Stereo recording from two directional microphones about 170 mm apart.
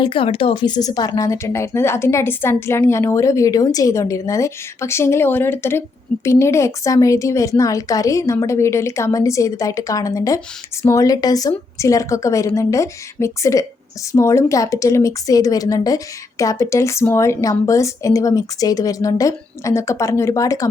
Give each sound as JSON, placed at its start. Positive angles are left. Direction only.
{"t": 0.0, "sound": "a woman's voice", "side_deg": 30}